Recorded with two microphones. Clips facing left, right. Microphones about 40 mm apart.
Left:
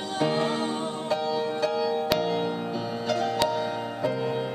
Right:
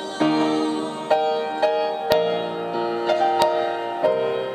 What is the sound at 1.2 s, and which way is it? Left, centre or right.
Music, right.